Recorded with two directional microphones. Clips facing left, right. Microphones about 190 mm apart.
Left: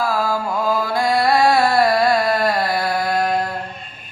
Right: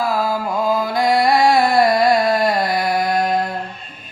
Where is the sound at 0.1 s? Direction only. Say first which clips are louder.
Right 1 dB; 20° right (ahead or behind).